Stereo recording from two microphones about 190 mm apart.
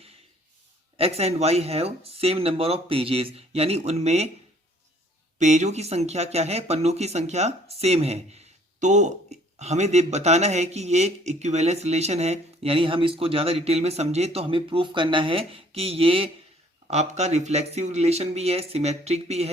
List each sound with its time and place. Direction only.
0.9 s speech: 30° right (ahead or behind)
5.4 s speech: 35° right (ahead or behind)